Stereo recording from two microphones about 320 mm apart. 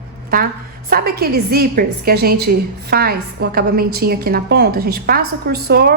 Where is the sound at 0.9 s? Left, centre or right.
Right.